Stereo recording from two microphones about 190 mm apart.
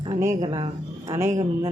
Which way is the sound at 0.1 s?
20° right (ahead or behind).